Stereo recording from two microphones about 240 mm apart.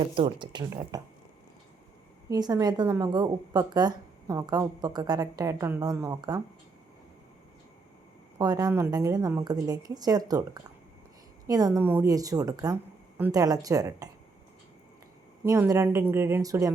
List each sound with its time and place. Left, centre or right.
0.2 s a woman's voice: centre
2.3 s a woman's voice: centre
8.4 s a woman's voice: centre
15.4 s a woman's voice: centre